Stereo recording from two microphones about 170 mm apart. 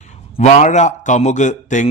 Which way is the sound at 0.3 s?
40° left (ahead or behind).